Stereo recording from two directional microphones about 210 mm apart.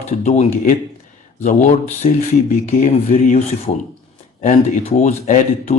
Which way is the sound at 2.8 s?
30° left (ahead or behind).